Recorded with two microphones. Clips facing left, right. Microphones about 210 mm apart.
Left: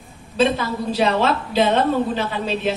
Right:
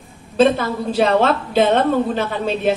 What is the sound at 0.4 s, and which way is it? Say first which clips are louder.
A woman's voice: right 4 dB; 50° right (ahead or behind).